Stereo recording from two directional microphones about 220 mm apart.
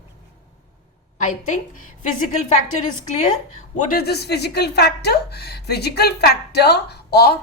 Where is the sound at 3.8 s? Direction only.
40° left (ahead or behind).